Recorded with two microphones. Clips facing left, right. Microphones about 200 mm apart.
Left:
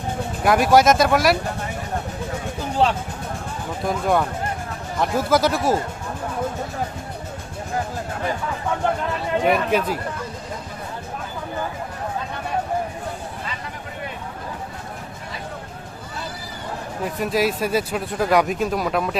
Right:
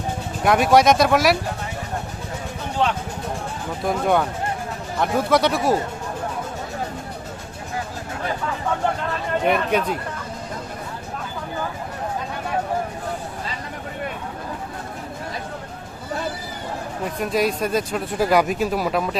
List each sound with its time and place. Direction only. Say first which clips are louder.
0.4 s speech: even; centre (ahead or behind)
2.8 s speech: left 2 dB; 35° left (ahead or behind)
3.8 s speech: right 1 dB; centre (ahead or behind)
5.3 s speech: even; centre (ahead or behind)
9.4 s speech: left 1 dB; centre (ahead or behind)
17.0 s speech: even; centre (ahead or behind)